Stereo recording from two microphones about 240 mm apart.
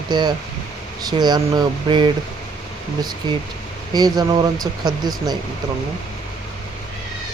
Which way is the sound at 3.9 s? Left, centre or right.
Centre.